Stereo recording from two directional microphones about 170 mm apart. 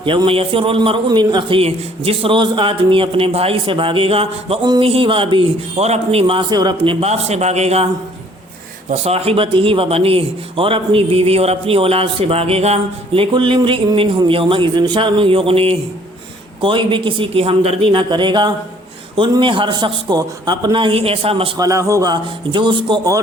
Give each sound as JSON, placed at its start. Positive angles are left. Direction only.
{"t": 0.0, "sound": "a man's voice", "side_deg": -30}
{"t": 7.0, "sound": "a man's voice", "side_deg": -40}
{"t": 8.9, "sound": "a man's voice", "side_deg": -40}
{"t": 21.6, "sound": "a man's voice", "side_deg": -20}